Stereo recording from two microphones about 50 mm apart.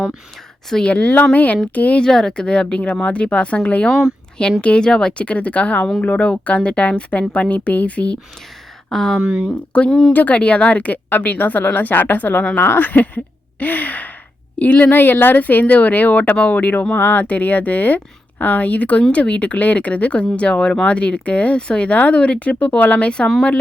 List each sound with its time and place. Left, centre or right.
0.9 s a woman's voice: left
2.0 s a woman's voice: centre
8.9 s speech: centre
9.2 s speech: centre
10.1 s speech: left
14.9 s speech: left
16.9 s speech: left
17.2 s a woman's voice: left
21.9 s a woman's voice: left